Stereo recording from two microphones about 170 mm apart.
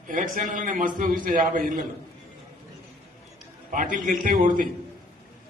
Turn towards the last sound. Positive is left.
turn(degrees=-55)  # may be behind; listen again after turning